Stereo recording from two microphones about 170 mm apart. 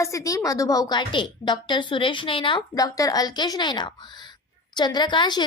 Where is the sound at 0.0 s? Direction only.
20° left (ahead or behind).